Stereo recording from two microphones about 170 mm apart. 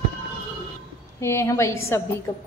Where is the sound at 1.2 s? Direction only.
15° left (ahead or behind).